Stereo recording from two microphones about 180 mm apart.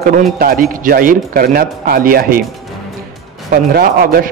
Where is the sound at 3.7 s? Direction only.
55° right (ahead or behind).